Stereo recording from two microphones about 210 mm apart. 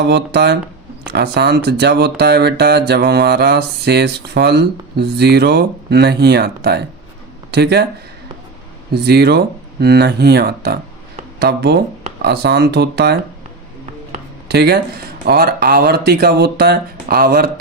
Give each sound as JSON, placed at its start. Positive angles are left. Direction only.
{"t": 0.0, "sound": "speech", "side_deg": -55}
{"t": 8.9, "sound": "speech", "side_deg": -50}
{"t": 14.4, "sound": "speech", "side_deg": -50}